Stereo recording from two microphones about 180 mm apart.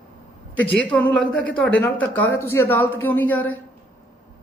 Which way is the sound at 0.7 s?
5° left (ahead or behind).